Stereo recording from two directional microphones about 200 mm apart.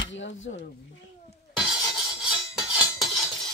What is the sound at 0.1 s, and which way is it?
Speech, 70° left (ahead or behind).